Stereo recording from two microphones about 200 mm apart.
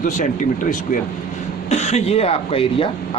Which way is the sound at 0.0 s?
40° left (ahead or behind).